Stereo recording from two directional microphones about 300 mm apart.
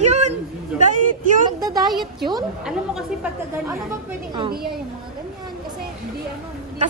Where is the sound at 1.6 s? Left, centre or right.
Centre.